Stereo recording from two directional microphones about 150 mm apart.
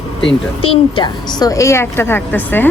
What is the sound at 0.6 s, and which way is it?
A woman's voice, 35° left (ahead or behind).